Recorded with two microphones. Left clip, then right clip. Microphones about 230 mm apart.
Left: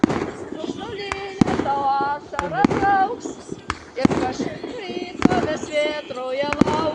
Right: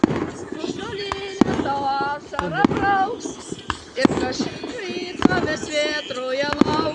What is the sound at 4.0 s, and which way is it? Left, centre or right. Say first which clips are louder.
Basketball bounce: right 2 dB; right.